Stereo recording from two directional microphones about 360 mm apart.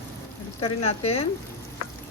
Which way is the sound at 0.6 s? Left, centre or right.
Centre.